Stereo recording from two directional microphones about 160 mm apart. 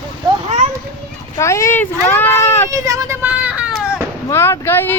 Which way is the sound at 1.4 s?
15° left (ahead or behind).